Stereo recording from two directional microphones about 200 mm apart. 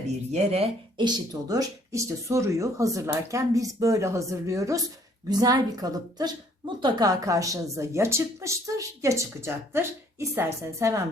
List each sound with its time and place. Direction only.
0.3 s a woman's voice: 30° right (ahead or behind); by 11.0 s 15° right (ahead or behind)